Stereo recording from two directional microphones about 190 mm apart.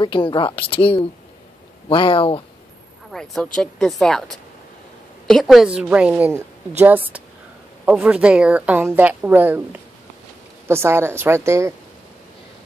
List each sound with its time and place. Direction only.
0.0 s speech: 25° left (ahead or behind)
3.1 s a woman's voice: centre (ahead or behind); by 11.7 s 15° right (ahead or behind)